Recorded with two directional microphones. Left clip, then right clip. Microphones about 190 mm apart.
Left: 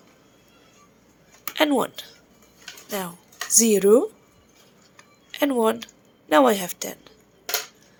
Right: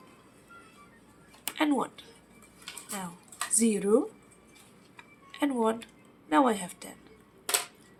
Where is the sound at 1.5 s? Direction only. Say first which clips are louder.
Left 8 dB; 55° left (ahead or behind).